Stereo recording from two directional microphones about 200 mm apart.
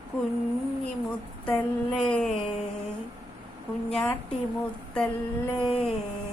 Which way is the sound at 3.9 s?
Centre (ahead or behind).